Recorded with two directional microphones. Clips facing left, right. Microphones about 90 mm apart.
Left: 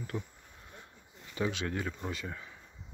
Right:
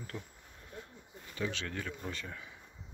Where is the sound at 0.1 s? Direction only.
5° left (ahead or behind).